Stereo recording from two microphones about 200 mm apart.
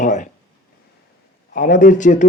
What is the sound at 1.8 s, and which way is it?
Speech, 40° left (ahead or behind).